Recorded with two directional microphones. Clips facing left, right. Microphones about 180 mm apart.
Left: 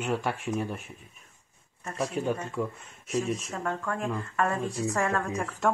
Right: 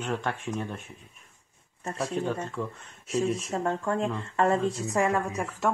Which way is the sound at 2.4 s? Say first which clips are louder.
Left 2 dB; 10° left (ahead or behind).